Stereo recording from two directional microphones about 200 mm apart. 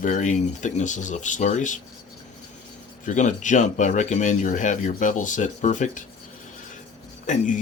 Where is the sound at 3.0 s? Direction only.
40° left (ahead or behind).